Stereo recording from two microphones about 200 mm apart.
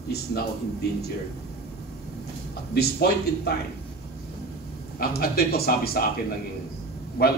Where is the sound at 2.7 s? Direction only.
55° left (ahead or behind).